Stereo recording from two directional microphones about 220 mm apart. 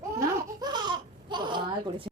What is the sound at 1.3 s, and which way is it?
Speech, 20° right (ahead or behind).